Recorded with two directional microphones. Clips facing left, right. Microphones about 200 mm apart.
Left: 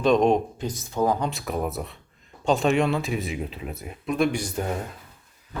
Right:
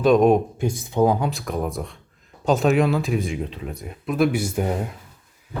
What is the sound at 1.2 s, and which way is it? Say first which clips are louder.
Speech: right 2 dB; centre (ahead or behind).